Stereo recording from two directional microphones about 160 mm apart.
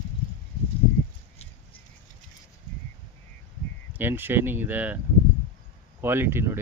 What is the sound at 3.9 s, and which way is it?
Speech, 15° right (ahead or behind).